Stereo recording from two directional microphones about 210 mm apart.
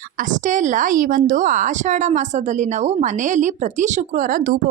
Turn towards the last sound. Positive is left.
turn(degrees=-40)  # may be behind; listen again after turning